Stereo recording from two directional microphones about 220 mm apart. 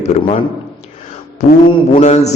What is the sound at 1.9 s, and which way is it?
Speech, 30° left (ahead or behind).